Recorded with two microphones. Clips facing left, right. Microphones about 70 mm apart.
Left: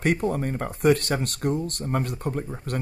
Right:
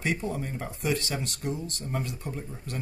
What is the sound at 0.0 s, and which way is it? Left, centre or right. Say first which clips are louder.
Speech: left 6 dB; left.